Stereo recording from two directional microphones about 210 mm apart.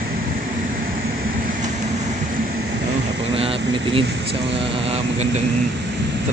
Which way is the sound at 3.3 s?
25° right (ahead or behind).